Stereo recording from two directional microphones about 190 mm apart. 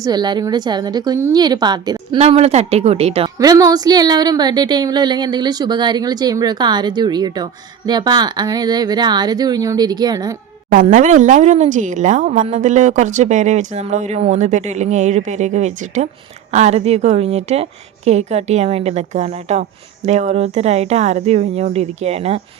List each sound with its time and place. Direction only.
0.0 s a woman's voice: 20° right (ahead or behind)
2.1 s speech: 35° right (ahead or behind)
3.3 s a woman's voice: 20° right (ahead or behind)
10.7 s speech: 45° right (ahead or behind)